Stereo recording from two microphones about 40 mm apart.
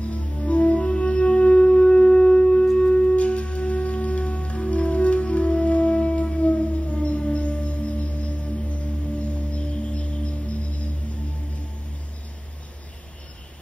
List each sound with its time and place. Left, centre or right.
0.1 s music: left